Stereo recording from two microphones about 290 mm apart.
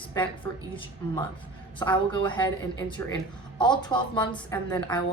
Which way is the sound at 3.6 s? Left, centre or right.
Centre.